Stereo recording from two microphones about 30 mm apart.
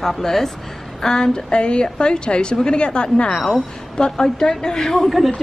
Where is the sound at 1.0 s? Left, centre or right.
Left.